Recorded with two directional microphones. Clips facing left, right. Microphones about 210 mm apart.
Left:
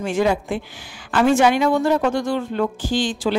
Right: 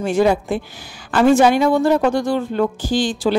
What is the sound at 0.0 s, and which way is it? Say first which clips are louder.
Speech: right 4 dB; 35° right (ahead or behind).